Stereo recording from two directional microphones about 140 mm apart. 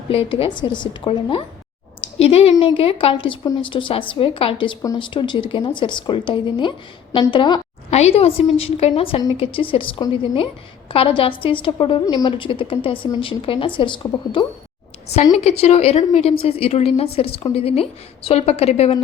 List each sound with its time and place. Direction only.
0.1 s speech: 40° left (ahead or behind)
7.9 s a woman's voice: 50° left (ahead or behind)
15.4 s a woman's voice: 50° left (ahead or behind)